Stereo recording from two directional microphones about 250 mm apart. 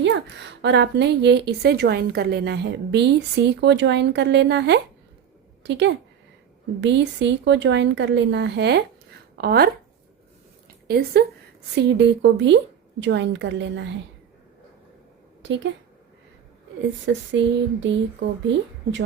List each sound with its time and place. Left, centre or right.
0.0 s a woman's voice: right
10.8 s a woman's voice: right
17.1 s a woman's voice: right